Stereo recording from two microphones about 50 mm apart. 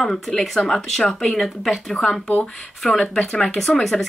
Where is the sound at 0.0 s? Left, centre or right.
Centre.